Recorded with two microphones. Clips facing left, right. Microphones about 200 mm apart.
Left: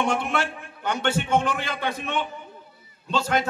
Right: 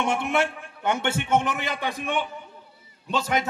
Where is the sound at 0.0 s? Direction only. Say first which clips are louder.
Right 1 dB; 20° right (ahead or behind).